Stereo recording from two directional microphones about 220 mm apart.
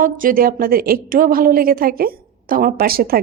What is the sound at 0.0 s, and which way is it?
A woman's voice, 40° right (ahead or behind).